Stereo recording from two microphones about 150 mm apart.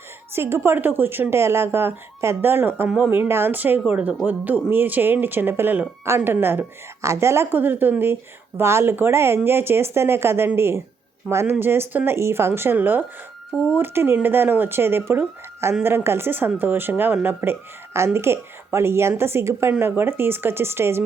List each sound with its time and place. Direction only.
0.3 s speech: 15° right (ahead or behind)